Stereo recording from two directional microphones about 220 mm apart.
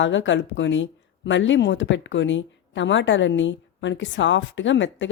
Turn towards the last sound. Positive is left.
turn(degrees=55)  # may be behind; listen again after turning